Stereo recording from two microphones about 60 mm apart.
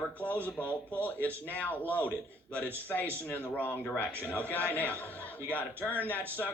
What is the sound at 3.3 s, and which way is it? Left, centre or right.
Speech, left.